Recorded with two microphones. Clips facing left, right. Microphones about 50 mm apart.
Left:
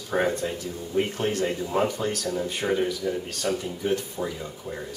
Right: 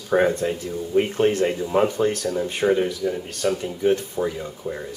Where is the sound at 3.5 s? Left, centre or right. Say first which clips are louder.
Right 5 dB; right.